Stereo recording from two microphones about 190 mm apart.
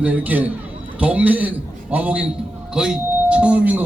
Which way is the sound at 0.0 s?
10° right (ahead or behind).